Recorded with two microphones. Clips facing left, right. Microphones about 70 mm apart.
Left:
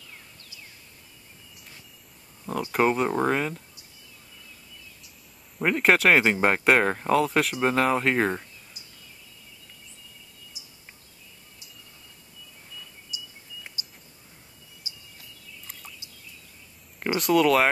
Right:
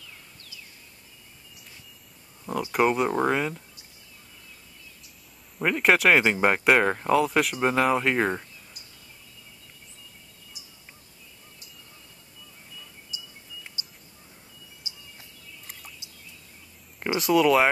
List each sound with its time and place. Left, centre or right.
2.6 s speech: centre
5.6 s speech: centre
10.6 s a sound: right
13.1 s cricket: right
13.8 s a sound: right
17.2 s speech: centre